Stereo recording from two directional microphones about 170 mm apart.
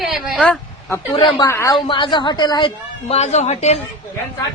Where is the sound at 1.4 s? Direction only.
20° left (ahead or behind).